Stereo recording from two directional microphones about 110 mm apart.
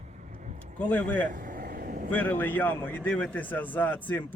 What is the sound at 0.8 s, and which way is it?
A man's voice, 15° left (ahead or behind).